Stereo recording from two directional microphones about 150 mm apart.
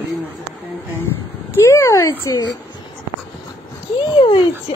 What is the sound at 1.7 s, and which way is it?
Speech, 15° left (ahead or behind).